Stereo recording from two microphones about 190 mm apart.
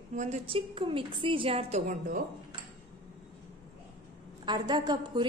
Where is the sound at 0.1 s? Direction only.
40° right (ahead or behind).